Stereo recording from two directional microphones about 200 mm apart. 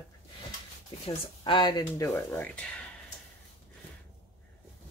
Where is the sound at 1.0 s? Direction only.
25° left (ahead or behind); by 2.9 s 5° left (ahead or behind).